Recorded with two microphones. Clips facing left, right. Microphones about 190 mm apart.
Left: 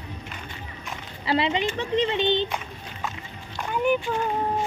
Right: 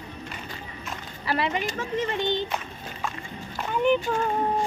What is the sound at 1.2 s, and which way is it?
Speech, 20° left (ahead or behind).